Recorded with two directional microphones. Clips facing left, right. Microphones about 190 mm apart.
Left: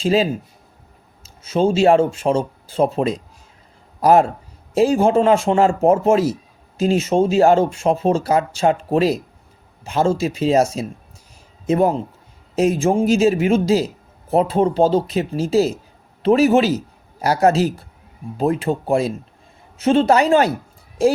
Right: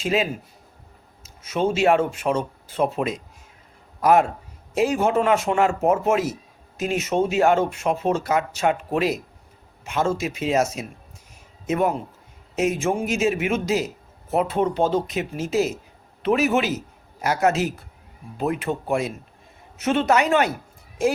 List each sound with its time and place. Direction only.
0.0 s a man's voice: 30° left (ahead or behind)